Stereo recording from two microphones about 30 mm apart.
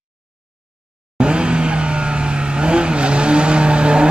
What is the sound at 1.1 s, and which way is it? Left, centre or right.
Vehicle, right.